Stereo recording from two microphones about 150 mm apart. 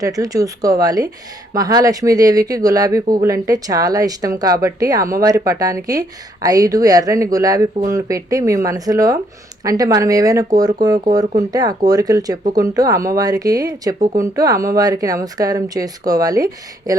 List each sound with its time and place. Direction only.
0.0 s speech: 25° right (ahead or behind)